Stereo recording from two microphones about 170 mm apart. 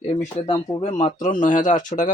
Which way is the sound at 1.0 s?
45° left (ahead or behind).